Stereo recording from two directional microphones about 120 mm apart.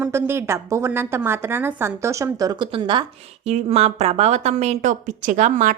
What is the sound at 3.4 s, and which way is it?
A woman's voice, 60° right (ahead or behind).